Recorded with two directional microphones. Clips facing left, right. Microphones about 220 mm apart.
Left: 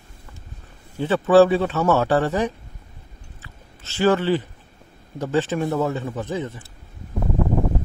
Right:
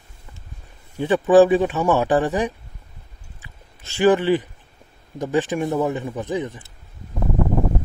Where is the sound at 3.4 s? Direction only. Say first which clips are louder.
Right 1 dB; 15° right (ahead or behind).